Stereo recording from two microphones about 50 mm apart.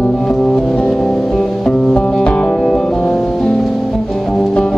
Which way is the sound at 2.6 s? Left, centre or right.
Centre.